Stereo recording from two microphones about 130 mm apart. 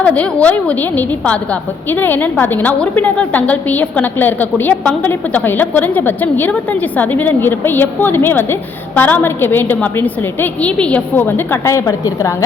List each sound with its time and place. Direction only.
0.0 s a woman's voice: 10° left (ahead or behind)